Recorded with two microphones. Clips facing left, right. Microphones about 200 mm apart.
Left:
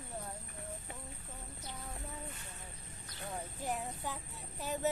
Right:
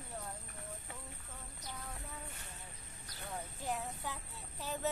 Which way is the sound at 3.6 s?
15° left (ahead or behind).